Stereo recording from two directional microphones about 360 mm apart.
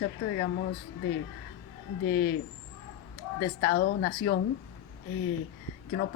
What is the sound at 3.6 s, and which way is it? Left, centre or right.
Speech, left.